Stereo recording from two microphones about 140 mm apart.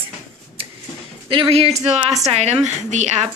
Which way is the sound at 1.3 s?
40° right (ahead or behind).